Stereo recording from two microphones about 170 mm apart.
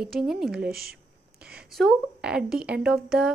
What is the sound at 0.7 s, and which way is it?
Speech, 65° right (ahead or behind).